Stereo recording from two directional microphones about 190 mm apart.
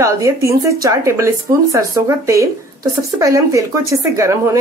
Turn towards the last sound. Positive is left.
turn(degrees=-15)  # may be behind; listen again after turning